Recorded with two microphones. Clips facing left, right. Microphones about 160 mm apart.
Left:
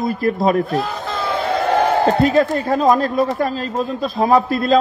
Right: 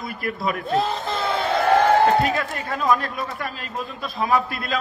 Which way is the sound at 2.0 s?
35° left (ahead or behind).